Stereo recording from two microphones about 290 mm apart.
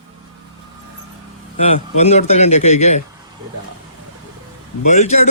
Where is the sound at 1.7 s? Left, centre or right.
Left.